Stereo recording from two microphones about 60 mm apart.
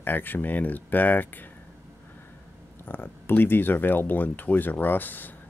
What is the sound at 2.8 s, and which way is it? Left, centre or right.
Speech, left.